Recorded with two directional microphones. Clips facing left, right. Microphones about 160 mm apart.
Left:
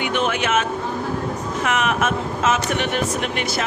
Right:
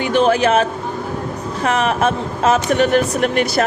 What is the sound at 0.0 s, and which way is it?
Speech, 35° right (ahead or behind).